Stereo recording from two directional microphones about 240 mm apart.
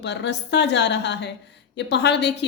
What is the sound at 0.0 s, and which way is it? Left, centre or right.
Speech, left.